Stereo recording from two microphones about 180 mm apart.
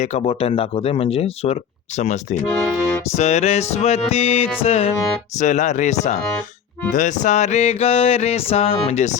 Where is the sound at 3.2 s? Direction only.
40° left (ahead or behind).